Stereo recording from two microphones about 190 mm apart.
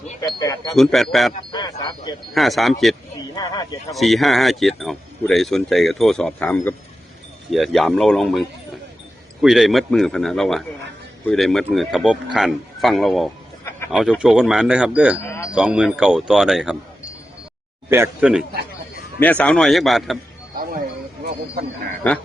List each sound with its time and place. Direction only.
0.2 s speech: 20° left (ahead or behind)
0.7 s speech: centre (ahead or behind)
1.4 s speech: 20° left (ahead or behind)
2.3 s speech: centre (ahead or behind)
3.3 s speech: 20° left (ahead or behind)
3.9 s speech: centre (ahead or behind)
13.7 s a sound: 15° left (ahead or behind)
13.9 s speech: centre (ahead or behind)
17.8 s speech: 10° right (ahead or behind)
19.2 s speech: 5° left (ahead or behind)